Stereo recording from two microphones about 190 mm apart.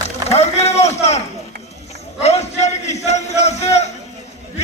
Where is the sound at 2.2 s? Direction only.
35° left (ahead or behind).